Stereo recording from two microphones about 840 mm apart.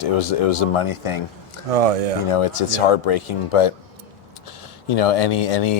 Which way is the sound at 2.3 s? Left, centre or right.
Left.